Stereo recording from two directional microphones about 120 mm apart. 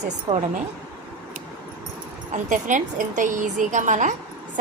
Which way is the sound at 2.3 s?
90° right.